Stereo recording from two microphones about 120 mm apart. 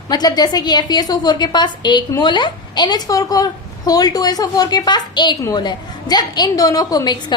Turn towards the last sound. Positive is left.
turn(degrees=35)  # may be behind; listen again after turning